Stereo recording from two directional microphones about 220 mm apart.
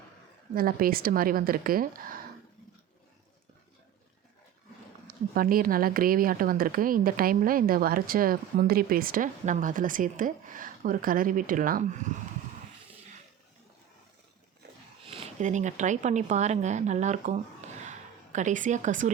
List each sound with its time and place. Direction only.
0.5 s speech: 40° right (ahead or behind)
5.0 s speech: 40° right (ahead or behind)
15.0 s speech: 30° right (ahead or behind)
17.8 s a sound: 35° right (ahead or behind)